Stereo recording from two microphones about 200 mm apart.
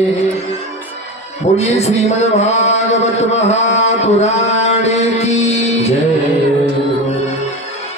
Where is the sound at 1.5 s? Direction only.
30° left (ahead or behind).